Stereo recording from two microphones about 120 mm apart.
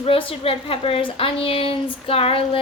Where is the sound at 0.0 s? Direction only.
50° left (ahead or behind).